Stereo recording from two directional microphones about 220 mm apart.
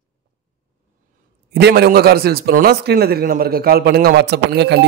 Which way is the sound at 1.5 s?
45° right (ahead or behind).